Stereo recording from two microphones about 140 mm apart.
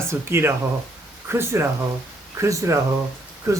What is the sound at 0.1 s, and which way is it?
Speech, 15° right (ahead or behind).